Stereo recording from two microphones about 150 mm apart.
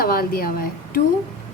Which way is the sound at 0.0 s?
80° left.